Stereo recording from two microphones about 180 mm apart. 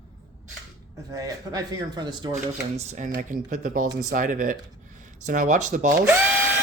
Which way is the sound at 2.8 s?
40° right (ahead or behind).